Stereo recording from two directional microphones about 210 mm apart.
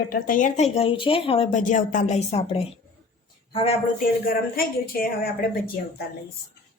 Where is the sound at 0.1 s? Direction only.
40° left (ahead or behind).